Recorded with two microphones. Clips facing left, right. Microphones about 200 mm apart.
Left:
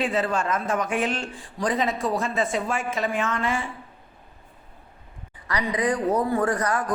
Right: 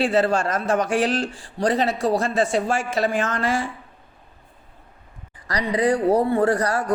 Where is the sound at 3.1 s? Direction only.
90° right.